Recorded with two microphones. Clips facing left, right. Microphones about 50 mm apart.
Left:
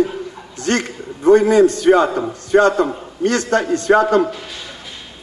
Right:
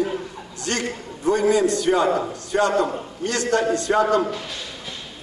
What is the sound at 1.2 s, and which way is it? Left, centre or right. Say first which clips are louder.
A man's voice: left 7 dB; left.